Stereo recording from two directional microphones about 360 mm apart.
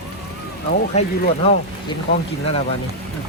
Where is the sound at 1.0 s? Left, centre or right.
Centre.